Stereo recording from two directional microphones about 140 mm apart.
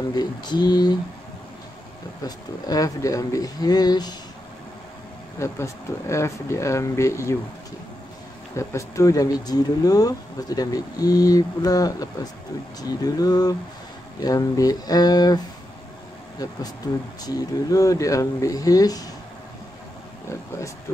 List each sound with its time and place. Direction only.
0.1 s speech: 30° left (ahead or behind)
2.2 s speech: 25° left (ahead or behind)
5.4 s speech: 20° left (ahead or behind)
8.5 s speech: 20° left (ahead or behind)
17.3 s speech: 25° left (ahead or behind)